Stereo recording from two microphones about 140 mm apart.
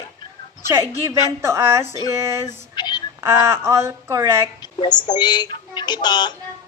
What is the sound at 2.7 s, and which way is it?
Female singing, 30° left (ahead or behind).